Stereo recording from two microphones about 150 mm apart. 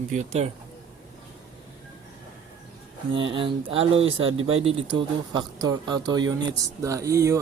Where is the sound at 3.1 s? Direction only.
35° right (ahead or behind).